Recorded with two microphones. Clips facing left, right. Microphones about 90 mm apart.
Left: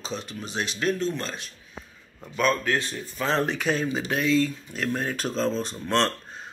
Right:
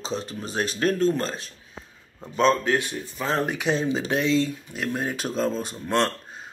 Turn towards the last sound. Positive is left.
turn(degrees=-10)  # may be behind; listen again after turning